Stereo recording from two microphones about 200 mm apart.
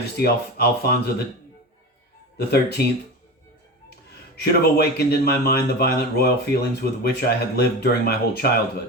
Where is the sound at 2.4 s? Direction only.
55° left (ahead or behind).